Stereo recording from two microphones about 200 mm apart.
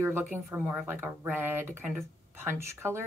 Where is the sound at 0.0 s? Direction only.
10° right (ahead or behind).